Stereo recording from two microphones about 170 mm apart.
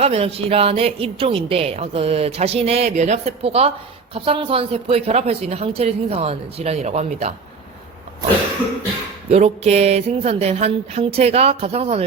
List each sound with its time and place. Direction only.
0.0 s speech: 35° right (ahead or behind)
9.3 s speech: 40° right (ahead or behind)